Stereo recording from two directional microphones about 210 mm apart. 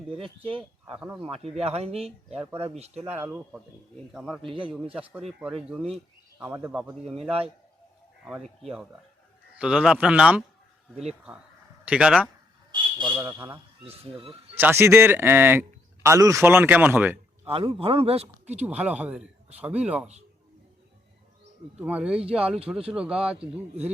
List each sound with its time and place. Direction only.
0.1 s a man's voice: 25° right (ahead or behind)
0.9 s speech: 5° right (ahead or behind)
1.2 s a man's voice: 30° right (ahead or behind)
3.0 s speech: 10° right (ahead or behind)
4.4 s a man's voice: 25° right (ahead or behind)
6.4 s speech: 10° right (ahead or behind)
11.9 s speech: 5° right (ahead or behind)
12.7 s a sound: 20° right (ahead or behind)
13.1 s speech: 10° right (ahead or behind)
13.8 s a man's voice: 25° right (ahead or behind)
14.6 s speech: 10° right (ahead or behind)
17.4 s a man's voice: 25° right (ahead or behind)
18.6 s speech: 5° right (ahead or behind)
21.8 s speech: 5° right (ahead or behind)